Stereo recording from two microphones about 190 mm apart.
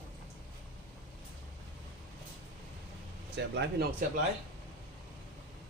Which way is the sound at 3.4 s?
65° right (ahead or behind).